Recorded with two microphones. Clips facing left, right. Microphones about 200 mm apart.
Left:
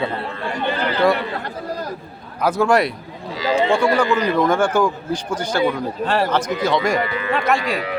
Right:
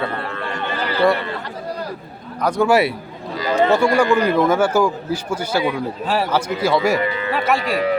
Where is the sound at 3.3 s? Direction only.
50° right (ahead or behind).